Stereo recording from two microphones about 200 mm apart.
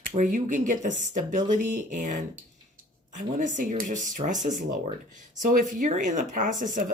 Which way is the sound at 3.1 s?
40° right (ahead or behind).